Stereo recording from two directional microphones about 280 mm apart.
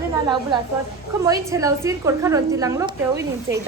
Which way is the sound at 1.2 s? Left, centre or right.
Centre.